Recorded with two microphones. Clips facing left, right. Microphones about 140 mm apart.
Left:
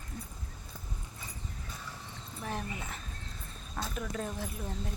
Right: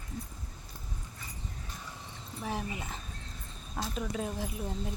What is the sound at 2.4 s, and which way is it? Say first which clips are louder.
Speech: right 2 dB; 10° right (ahead or behind).